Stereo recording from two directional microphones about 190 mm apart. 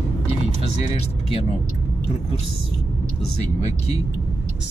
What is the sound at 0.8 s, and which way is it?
Speech, 30° left (ahead or behind).